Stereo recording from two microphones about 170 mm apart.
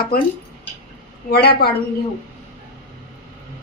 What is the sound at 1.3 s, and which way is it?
Speech, 70° left (ahead or behind).